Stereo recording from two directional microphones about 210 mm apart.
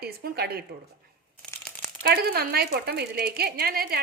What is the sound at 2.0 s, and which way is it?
A woman's voice, 50° right (ahead or behind).